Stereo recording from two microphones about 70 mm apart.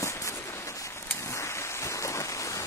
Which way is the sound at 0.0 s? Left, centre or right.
Left.